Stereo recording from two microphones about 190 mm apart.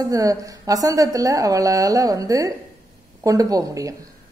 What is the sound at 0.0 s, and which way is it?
A woman's voice, 20° right (ahead or behind).